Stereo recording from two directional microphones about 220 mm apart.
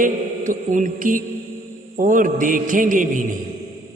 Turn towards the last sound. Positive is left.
turn(degrees=-35)  # may be behind; listen again after turning